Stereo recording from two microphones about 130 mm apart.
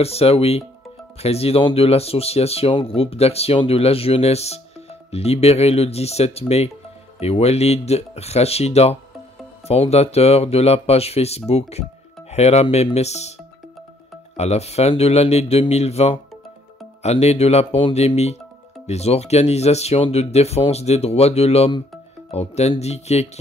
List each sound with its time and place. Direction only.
0.0 s speech: 50° left (ahead or behind)
14.3 s speech: 55° left (ahead or behind)